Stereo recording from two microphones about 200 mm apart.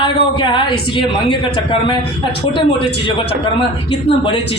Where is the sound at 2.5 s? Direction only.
25° left (ahead or behind).